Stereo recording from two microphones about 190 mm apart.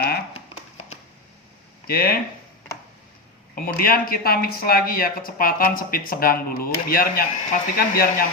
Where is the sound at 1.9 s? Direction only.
55° left (ahead or behind).